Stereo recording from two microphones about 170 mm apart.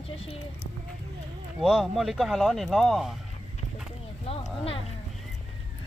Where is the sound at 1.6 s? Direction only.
5° right (ahead or behind).